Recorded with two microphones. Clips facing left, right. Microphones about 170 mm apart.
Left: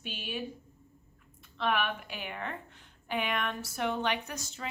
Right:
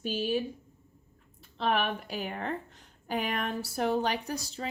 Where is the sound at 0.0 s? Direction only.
40° right (ahead or behind).